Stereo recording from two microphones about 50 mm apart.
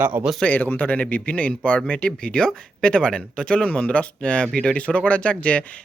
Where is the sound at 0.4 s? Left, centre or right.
Left.